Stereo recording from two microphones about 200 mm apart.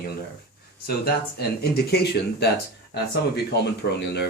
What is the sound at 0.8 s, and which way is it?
Speech, 50° left (ahead or behind).